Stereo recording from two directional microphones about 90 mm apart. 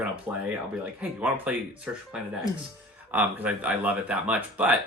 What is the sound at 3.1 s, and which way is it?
Speech, 20° right (ahead or behind).